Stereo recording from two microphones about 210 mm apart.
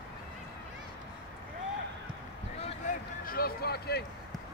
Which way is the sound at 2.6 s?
30° left (ahead or behind).